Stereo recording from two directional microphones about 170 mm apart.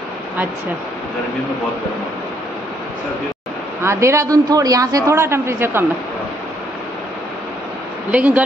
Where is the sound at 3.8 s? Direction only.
15° right (ahead or behind).